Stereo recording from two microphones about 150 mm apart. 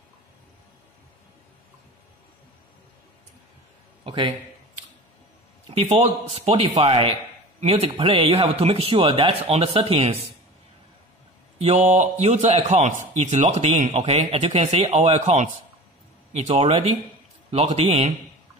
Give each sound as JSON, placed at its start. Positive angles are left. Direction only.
{"t": 4.0, "sound": "a sound", "side_deg": -35}
{"t": 5.8, "sound": "speech", "side_deg": -40}
{"t": 11.5, "sound": "a man's voice", "side_deg": -45}